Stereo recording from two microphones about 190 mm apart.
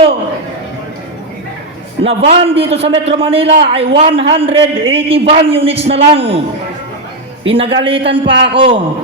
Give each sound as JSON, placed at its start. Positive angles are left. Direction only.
{"t": 2.0, "sound": "a man's voice", "side_deg": -30}
{"t": 7.4, "sound": "a man's voice", "side_deg": -30}